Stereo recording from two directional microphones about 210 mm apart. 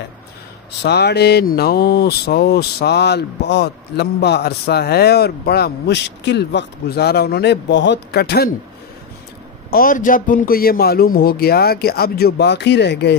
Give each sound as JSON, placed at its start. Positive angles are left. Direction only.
{"t": 0.8, "sound": "speech", "side_deg": 50}
{"t": 9.7, "sound": "speech", "side_deg": 45}